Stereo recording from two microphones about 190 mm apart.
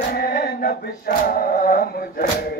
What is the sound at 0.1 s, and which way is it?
Chant, 55° left (ahead or behind).